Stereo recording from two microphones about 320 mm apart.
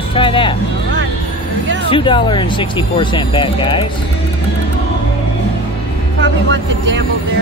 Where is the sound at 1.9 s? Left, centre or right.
Centre.